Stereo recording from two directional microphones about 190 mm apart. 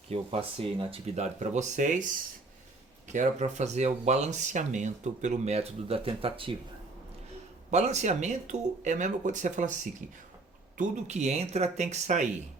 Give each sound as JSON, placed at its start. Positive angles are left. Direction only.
{"t": 0.1, "sound": "speech", "side_deg": -30}
{"t": 3.1, "sound": "speech", "side_deg": -40}
{"t": 7.7, "sound": "speech", "side_deg": -35}
{"t": 10.8, "sound": "speech", "side_deg": -40}